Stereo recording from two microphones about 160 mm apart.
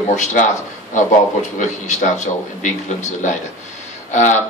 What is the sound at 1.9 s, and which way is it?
Speech, 50° left (ahead or behind).